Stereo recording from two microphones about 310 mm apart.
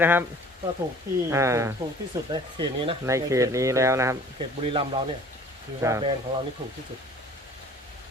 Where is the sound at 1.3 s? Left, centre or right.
Centre.